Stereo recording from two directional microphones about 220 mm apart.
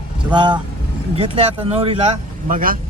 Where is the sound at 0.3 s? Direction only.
20° right (ahead or behind).